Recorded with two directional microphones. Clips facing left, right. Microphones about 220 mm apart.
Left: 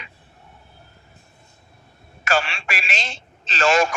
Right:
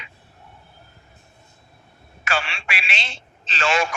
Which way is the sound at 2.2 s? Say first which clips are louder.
Left 4 dB; 45° left (ahead or behind).